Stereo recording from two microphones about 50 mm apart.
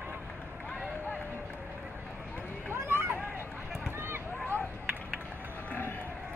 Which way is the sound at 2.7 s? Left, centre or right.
Right.